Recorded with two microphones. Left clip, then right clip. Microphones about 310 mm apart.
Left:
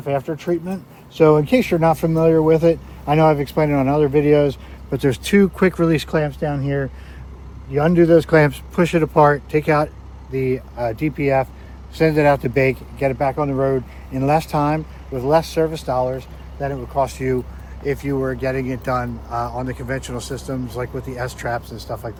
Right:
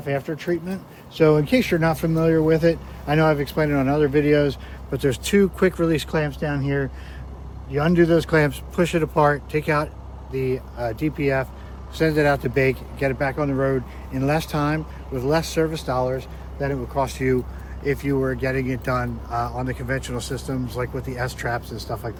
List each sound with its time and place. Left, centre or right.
0.0 s speech: centre